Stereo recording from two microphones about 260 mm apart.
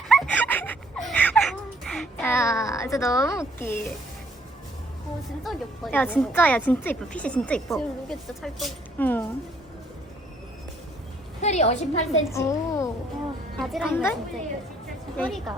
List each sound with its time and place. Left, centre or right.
0.1 s a sound: centre
5.4 s a woman's voice: centre
11.3 s a woman's voice: left
12.3 s a woman's voice: centre
13.6 s a woman's voice: centre
15.2 s a woman's voice: centre